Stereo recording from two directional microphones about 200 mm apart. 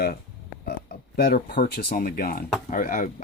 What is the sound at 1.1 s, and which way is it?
Speech, 50° left (ahead or behind).